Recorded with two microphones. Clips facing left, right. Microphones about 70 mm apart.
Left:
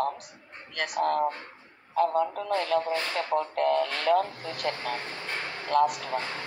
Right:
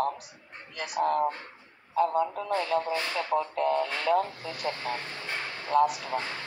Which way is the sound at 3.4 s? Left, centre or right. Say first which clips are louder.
Left 2 dB; left.